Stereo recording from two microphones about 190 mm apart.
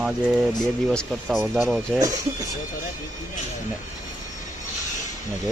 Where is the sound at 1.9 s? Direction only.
20° right (ahead or behind).